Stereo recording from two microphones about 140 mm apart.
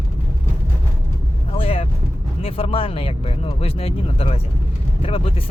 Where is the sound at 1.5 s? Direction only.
40° left (ahead or behind).